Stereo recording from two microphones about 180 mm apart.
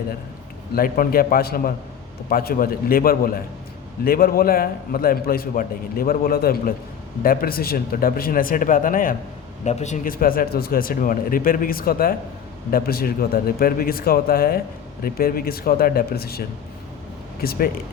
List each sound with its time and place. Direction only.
0.8 s a man's voice: 55° left (ahead or behind)
17.4 s a man's voice: 55° left (ahead or behind)